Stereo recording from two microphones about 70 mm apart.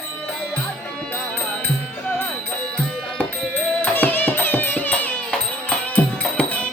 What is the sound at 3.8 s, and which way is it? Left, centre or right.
Music, left.